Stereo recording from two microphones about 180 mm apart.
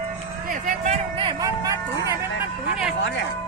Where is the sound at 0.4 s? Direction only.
45° right (ahead or behind).